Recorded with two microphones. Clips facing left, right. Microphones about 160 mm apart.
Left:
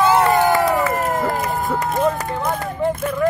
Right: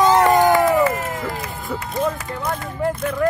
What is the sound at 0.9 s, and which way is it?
Run, 55° left (ahead or behind).